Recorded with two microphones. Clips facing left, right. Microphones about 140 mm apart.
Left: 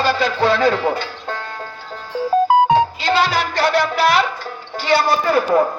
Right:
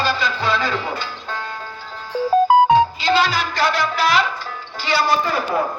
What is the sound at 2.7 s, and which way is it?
Music, 65° left (ahead or behind).